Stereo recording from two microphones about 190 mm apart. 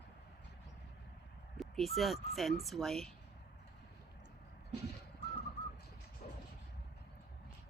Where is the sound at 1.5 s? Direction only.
Centre (ahead or behind).